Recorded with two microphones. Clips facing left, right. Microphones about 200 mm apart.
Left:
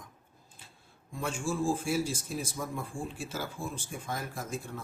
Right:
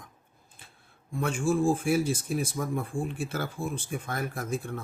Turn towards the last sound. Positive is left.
turn(degrees=-60)  # may be behind; listen again after turning